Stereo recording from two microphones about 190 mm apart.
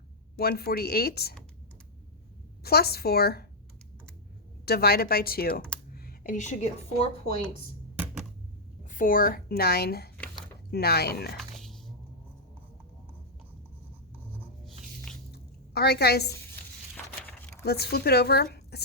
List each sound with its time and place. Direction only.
0.3 s speech: 55° left (ahead or behind)
2.6 s speech: 55° left (ahead or behind)
4.6 s speech: 55° left (ahead or behind); by 7.3 s 30° left (ahead or behind)
8.8 s a woman's voice: 45° left (ahead or behind)
11.3 s a sound: centre (ahead or behind)
14.3 s writing: centre (ahead or behind)
15.3 s a sound: 60° left (ahead or behind)
17.2 s a sound: 10° left (ahead or behind)
17.7 s speech: 55° left (ahead or behind)